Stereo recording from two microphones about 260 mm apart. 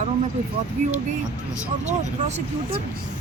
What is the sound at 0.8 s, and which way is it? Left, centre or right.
Speech, right.